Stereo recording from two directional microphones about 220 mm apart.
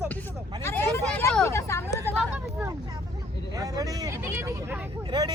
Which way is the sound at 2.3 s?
10° right (ahead or behind).